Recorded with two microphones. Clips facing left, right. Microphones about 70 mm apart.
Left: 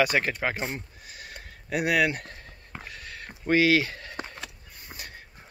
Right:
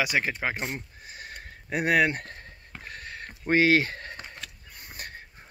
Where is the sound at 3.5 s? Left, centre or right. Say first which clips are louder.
Even; right.